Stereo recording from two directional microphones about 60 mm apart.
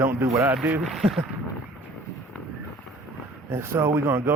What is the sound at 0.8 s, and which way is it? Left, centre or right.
Speech, centre.